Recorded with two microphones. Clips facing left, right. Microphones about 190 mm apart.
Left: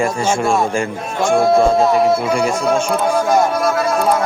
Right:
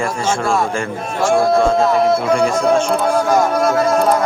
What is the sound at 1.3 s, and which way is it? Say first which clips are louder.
Speech: left 1 dB; centre (ahead or behind).